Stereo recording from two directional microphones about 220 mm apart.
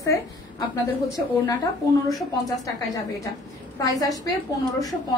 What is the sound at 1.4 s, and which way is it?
A woman's voice, 15° left (ahead or behind).